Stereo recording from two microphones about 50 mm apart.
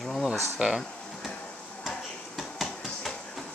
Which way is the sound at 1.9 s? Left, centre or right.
Centre.